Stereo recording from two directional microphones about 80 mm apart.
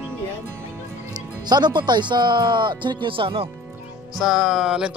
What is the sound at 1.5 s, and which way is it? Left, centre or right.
Speech, right.